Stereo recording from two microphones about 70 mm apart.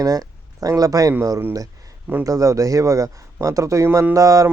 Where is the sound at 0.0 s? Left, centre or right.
Right.